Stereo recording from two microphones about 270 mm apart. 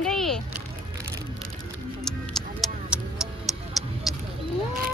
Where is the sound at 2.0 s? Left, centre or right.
Centre.